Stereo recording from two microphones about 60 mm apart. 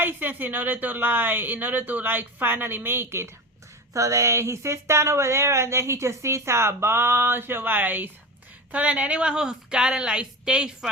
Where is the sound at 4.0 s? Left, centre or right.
Right.